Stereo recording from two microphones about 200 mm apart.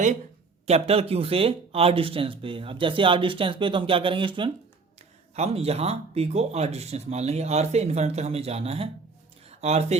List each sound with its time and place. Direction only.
0.7 s speech: 30° right (ahead or behind)